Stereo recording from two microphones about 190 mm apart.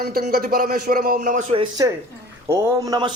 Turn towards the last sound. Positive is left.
turn(degrees=-20)  # may be behind; listen again after turning